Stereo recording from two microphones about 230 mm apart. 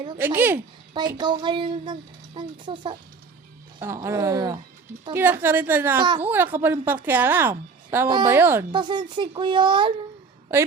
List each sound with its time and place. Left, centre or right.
0.2 s a woman's voice: centre
6.2 s a woman's voice: centre
8.7 s speech: centre